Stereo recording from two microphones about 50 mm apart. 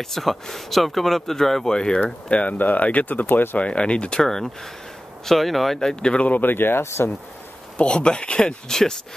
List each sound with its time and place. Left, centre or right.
0.0 s speech: centre
2.3 s speech: left
3.5 s speech: left
4.2 s speech: centre
5.8 s speech: centre
6.2 s speech: left
7.7 s speech: centre